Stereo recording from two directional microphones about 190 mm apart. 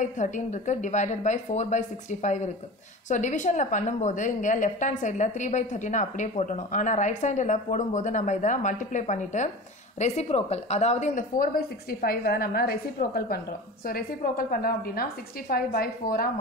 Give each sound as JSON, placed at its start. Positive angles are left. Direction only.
{"t": 0.0, "sound": "a woman's voice", "side_deg": 40}